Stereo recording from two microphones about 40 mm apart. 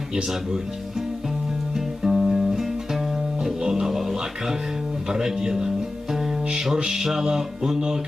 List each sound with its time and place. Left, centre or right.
1.7 s music: centre
3.4 s mantra: centre